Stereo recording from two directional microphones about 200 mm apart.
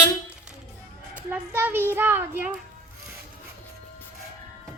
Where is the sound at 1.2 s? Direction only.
10° right (ahead or behind).